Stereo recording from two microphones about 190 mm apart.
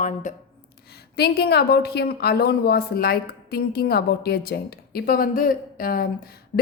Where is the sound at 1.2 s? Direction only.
55° left (ahead or behind).